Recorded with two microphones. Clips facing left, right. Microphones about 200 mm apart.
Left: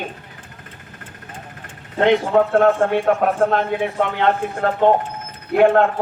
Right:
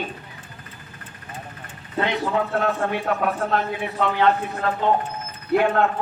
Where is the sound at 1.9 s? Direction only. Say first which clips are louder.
Left 8 dB; 50° left (ahead or behind).